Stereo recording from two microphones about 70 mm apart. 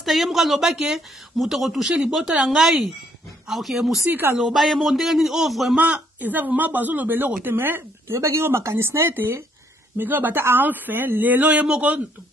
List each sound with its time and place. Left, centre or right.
0.0 s a woman's voice: centre
1.9 s a woman's voice: centre
4.0 s speech: right
4.4 s a woman's voice: centre
5.8 s speech: right
8.2 s speech: right; by 11.8 s centre